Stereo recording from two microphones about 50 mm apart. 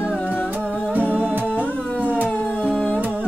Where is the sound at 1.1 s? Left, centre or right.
Right.